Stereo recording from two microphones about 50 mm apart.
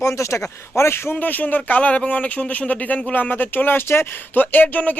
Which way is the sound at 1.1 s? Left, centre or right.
Left.